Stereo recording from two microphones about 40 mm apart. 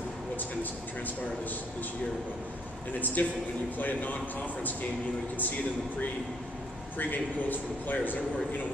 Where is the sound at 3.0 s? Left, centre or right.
Left.